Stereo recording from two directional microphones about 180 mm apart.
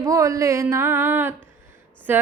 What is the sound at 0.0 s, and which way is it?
Speech, 15° right (ahead or behind).